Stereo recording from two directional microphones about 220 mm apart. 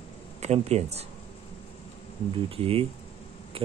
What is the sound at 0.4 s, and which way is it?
Speech, 30° right (ahead or behind).